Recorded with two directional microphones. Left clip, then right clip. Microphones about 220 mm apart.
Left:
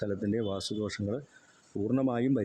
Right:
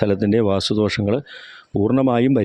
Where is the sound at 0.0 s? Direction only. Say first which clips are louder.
Right 14 dB; 40° right (ahead or behind).